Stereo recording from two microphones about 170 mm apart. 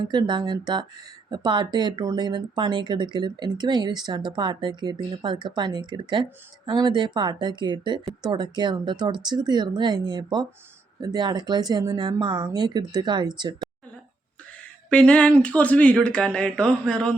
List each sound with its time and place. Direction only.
0.0 s speech: 25° right (ahead or behind)
14.8 s speech: 5° left (ahead or behind)